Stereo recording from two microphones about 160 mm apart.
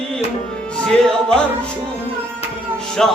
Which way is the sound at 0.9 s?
5° left (ahead or behind).